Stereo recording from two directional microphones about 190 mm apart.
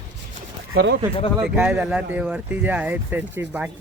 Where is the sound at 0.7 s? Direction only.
65° right (ahead or behind).